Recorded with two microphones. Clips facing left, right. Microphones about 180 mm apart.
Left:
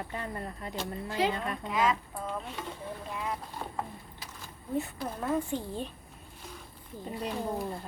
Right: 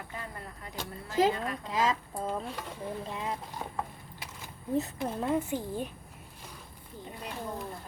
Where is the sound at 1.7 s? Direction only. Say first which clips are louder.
Left 1 dB; 30° right (ahead or behind).